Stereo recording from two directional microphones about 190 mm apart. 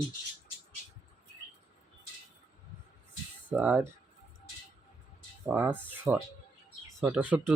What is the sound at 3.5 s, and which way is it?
Speech, 5° right (ahead or behind).